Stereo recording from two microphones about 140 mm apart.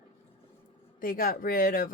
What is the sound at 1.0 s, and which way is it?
Speech, 85° left.